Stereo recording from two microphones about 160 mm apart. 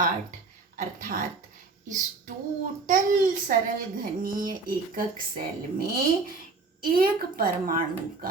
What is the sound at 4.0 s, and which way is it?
Speech, 60° right (ahead or behind).